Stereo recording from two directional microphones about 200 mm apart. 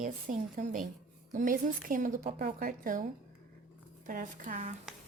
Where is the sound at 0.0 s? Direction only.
40° right (ahead or behind).